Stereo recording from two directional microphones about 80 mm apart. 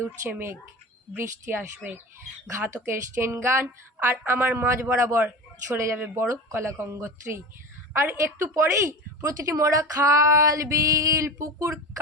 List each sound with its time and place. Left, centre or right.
0.0 s a woman's voice: right